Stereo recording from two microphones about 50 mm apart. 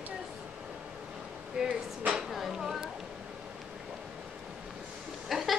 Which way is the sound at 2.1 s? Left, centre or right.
Centre.